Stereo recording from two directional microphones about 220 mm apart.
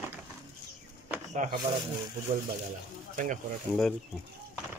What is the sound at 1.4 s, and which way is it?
Speech, 35° right (ahead or behind).